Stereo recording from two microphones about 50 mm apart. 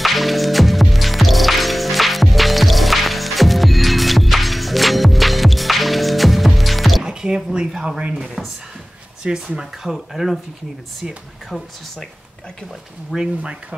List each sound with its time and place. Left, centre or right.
0.0 s music: centre
7.0 s a sound: centre
8.1 s drawer open or close: centre
9.2 s speech: right
10.1 s speech: centre
13.4 s speech: right